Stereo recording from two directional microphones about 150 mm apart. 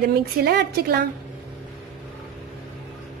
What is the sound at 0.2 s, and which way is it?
Speech, 90° right.